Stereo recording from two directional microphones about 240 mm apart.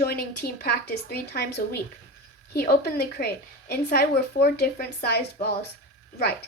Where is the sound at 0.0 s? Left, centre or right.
Left.